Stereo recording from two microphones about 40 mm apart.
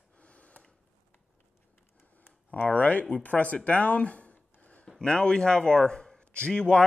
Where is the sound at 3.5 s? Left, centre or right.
Left.